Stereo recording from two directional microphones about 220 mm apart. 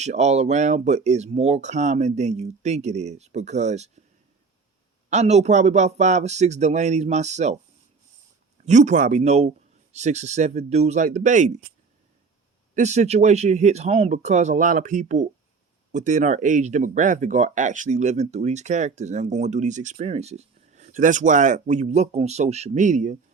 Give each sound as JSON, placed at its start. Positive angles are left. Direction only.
{"t": 0.0, "sound": "speech", "side_deg": -30}
{"t": 5.0, "sound": "speech", "side_deg": -30}
{"t": 8.6, "sound": "speech", "side_deg": -35}
{"t": 12.7, "sound": "speech", "side_deg": -30}